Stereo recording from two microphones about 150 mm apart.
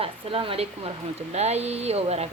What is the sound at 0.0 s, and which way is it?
Speech, 40° right (ahead or behind).